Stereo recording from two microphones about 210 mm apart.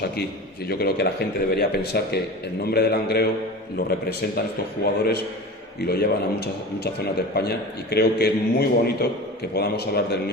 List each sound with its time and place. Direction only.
0.7 s a man's voice: 50° left (ahead or behind)
4.4 s a man's voice: 50° left (ahead or behind)